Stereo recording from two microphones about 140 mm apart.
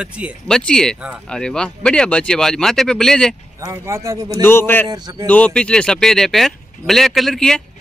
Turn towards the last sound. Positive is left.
turn(degrees=5)  # may be behind; listen again after turning